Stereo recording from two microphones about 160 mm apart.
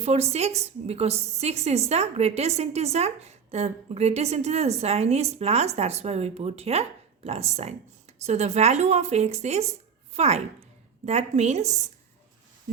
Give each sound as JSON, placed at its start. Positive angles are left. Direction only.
{"t": 0.0, "sound": "a woman's voice", "side_deg": -40}